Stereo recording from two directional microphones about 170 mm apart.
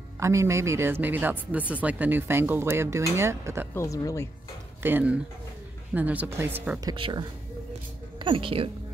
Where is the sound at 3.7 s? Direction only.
20° left (ahead or behind).